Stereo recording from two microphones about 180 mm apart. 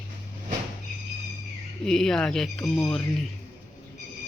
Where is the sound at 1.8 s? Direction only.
Centre (ahead or behind).